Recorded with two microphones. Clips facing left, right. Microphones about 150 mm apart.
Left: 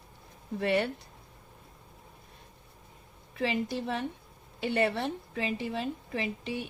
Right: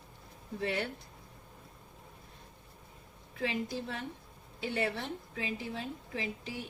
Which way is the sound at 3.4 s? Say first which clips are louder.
Left 4 dB; 70° left (ahead or behind).